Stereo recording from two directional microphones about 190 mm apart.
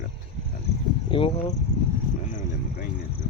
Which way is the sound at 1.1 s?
30° left (ahead or behind).